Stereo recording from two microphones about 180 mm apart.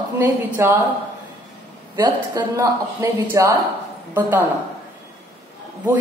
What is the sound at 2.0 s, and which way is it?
A woman's voice, 15° right (ahead or behind).